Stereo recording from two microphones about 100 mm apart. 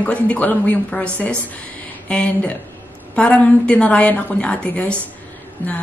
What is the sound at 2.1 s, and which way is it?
A woman's voice, 15° left (ahead or behind).